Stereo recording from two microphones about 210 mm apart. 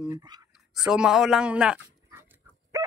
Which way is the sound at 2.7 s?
15° right (ahead or behind).